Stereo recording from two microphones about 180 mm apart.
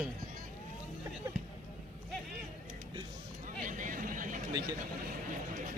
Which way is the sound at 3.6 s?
45° right (ahead or behind).